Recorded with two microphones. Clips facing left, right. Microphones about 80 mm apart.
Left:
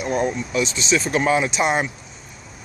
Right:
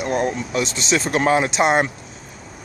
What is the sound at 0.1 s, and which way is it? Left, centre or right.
Speech, centre.